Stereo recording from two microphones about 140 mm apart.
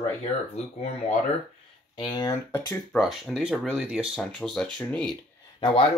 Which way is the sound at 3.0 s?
Centre (ahead or behind).